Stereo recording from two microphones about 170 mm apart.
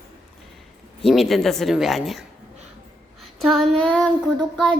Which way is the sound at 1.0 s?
Centre (ahead or behind).